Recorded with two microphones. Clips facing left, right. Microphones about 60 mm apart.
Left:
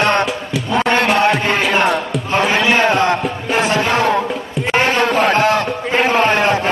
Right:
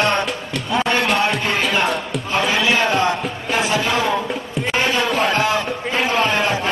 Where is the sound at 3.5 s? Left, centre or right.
Left.